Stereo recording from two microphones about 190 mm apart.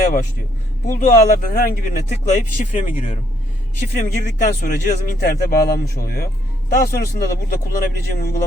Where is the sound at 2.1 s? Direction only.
35° left (ahead or behind).